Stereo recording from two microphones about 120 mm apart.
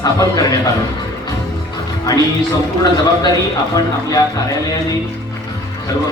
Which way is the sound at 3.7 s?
30° left (ahead or behind).